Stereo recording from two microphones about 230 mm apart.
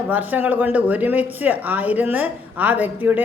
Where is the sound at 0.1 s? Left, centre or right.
Centre.